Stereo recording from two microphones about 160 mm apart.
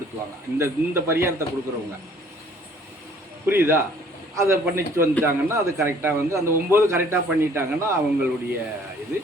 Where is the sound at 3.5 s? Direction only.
15° right (ahead or behind).